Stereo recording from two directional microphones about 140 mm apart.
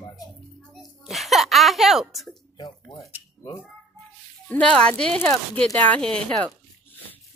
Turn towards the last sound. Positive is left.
turn(degrees=5)  # may be behind; listen again after turning